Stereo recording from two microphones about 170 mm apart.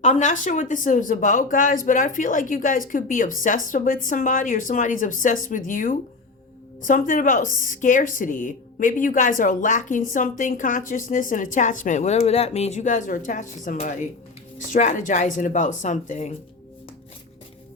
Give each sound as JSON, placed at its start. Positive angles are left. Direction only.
{"t": 0.0, "sound": "a woman's voice", "side_deg": 45}